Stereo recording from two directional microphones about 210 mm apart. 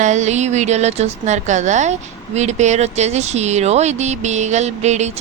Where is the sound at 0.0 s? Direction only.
35° right (ahead or behind).